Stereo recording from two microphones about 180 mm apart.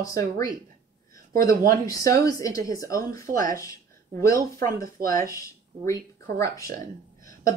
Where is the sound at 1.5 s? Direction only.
55° right (ahead or behind).